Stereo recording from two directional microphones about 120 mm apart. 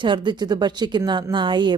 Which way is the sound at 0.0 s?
40° right (ahead or behind).